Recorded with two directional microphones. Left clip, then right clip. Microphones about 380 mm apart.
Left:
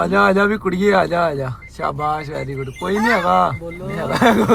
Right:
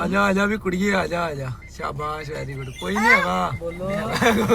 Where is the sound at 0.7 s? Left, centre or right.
Centre.